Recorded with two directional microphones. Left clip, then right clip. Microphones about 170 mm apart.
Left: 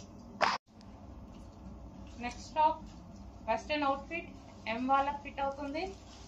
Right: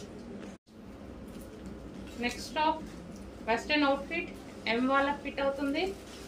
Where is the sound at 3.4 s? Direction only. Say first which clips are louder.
Right 4 dB; 30° right (ahead or behind).